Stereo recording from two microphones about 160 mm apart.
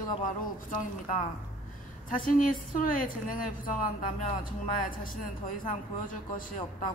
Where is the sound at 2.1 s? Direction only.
55° left (ahead or behind).